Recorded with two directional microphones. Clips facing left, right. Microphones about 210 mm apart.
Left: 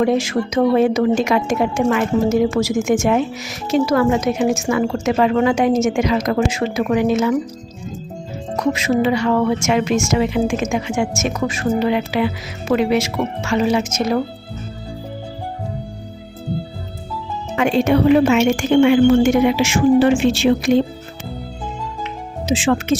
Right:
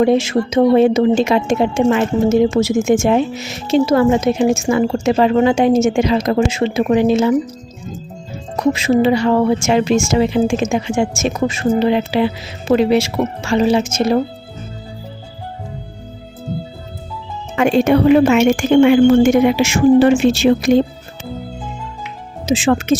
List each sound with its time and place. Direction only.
0.0 s speech: 25° right (ahead or behind)
8.5 s speech: 30° right (ahead or behind)
17.6 s a woman's voice: 50° right (ahead or behind)
22.4 s speech: 40° right (ahead or behind)